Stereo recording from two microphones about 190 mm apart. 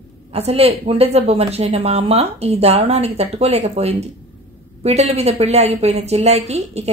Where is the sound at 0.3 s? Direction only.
30° right (ahead or behind).